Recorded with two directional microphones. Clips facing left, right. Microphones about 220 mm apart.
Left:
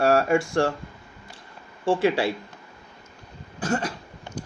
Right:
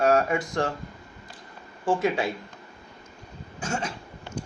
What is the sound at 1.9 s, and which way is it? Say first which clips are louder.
Speech: left 3 dB; 30° left (ahead or behind).